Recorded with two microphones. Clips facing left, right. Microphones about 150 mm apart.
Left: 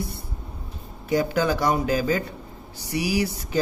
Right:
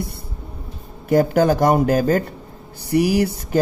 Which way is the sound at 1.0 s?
50° right (ahead or behind).